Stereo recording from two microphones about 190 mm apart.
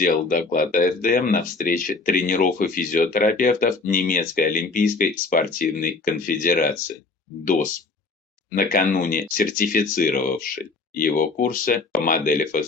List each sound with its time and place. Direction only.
0.0 s speech: 45° left (ahead or behind)
8.4 s speech: 45° left (ahead or behind)